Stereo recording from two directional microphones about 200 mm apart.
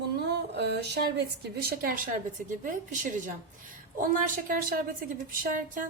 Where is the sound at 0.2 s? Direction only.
55° right (ahead or behind).